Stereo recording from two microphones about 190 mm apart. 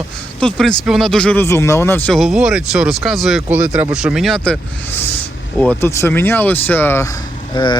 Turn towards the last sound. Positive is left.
turn(degrees=25)  # may be behind; listen again after turning